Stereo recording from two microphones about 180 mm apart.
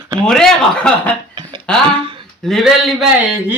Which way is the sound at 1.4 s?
25° right (ahead or behind).